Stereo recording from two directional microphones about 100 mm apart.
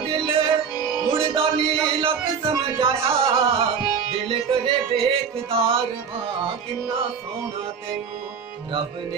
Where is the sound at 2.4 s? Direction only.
65° right (ahead or behind).